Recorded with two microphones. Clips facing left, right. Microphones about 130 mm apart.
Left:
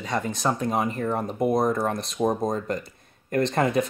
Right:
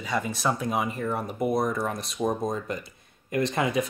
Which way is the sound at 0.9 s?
30° left (ahead or behind).